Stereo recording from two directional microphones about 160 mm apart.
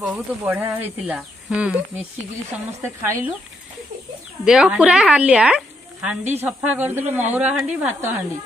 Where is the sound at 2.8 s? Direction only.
15° right (ahead or behind).